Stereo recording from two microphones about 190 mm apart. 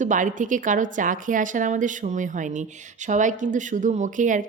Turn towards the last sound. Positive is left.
turn(degrees=-40)  # may be behind; listen again after turning